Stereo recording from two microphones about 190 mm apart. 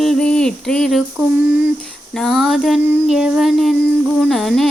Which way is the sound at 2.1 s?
Centre (ahead or behind).